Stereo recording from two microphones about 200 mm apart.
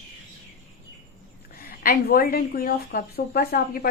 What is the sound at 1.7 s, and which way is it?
A woman's voice, 50° left (ahead or behind).